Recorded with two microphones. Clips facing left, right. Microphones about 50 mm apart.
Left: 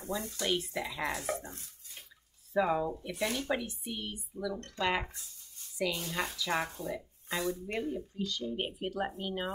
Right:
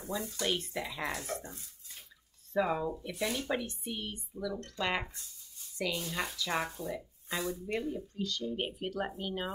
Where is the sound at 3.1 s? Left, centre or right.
Left.